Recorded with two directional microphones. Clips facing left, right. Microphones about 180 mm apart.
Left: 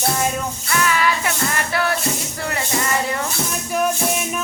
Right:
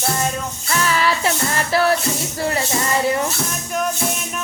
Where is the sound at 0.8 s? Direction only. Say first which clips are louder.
Right 1 dB; 30° right (ahead or behind).